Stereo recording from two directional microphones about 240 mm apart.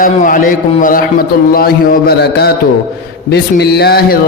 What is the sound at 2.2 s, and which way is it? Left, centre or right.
A man's voice, left.